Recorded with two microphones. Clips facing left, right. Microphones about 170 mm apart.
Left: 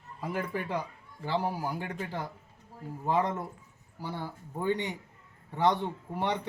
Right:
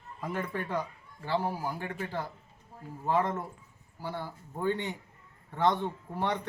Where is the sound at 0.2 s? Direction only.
10° left (ahead or behind).